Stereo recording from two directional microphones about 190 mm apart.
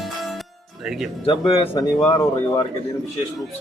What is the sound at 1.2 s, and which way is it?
Speech, 30° left (ahead or behind).